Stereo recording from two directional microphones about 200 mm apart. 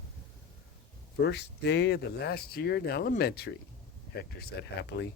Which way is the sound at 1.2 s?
55° left (ahead or behind).